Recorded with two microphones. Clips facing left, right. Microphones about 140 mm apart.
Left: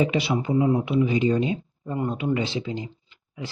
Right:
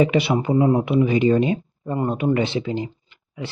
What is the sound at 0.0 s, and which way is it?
Speech, 65° right (ahead or behind).